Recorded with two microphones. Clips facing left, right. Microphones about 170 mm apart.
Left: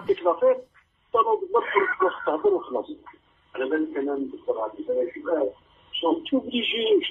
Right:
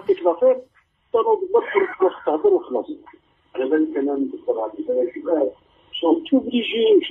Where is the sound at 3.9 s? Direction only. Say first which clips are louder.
Right 5 dB; 25° right (ahead or behind).